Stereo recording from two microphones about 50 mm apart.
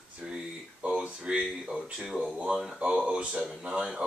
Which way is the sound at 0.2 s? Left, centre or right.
Centre.